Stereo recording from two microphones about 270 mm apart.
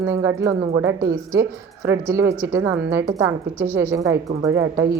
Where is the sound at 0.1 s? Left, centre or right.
Centre.